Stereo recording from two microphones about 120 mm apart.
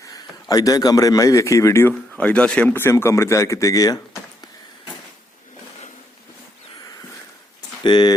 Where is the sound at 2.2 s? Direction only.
10° left (ahead or behind); by 4.0 s 30° left (ahead or behind).